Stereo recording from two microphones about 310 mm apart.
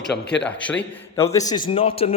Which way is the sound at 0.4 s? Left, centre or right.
Centre.